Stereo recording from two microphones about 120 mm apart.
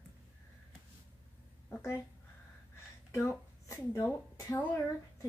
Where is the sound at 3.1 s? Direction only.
25° left (ahead or behind).